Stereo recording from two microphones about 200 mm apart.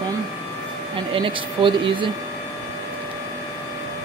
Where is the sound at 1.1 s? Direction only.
25° right (ahead or behind).